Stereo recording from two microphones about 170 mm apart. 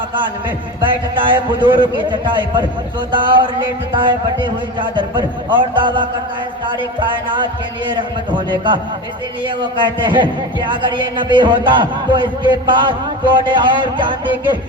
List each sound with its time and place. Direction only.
1.3 s speech: 30° right (ahead or behind)
8.4 s speech: 25° right (ahead or behind)